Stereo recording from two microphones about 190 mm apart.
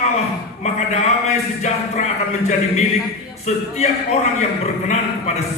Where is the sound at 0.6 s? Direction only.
35° left (ahead or behind).